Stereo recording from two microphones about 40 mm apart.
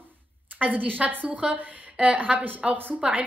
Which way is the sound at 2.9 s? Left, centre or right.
Right.